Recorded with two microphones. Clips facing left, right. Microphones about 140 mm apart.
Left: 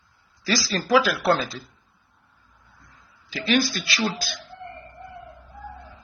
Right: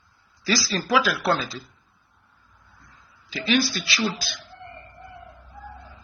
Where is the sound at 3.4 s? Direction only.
50° left (ahead or behind).